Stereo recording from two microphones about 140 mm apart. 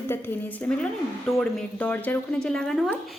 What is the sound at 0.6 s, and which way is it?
Speech, 5° left (ahead or behind).